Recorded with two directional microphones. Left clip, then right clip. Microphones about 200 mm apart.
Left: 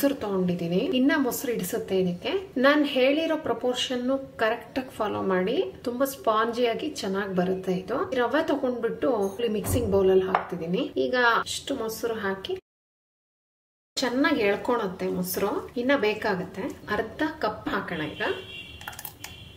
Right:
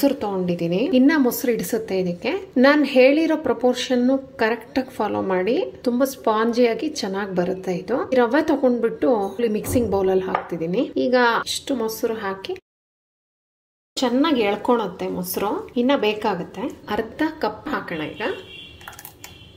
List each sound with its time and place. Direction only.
0.0 s a woman's voice: 30° right (ahead or behind)
13.9 s speech: 25° right (ahead or behind)